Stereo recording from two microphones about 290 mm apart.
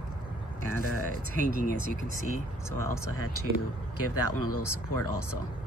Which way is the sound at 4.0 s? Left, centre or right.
Left.